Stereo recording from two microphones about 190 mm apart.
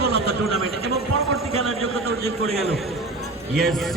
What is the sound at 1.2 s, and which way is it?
Speech, centre (ahead or behind).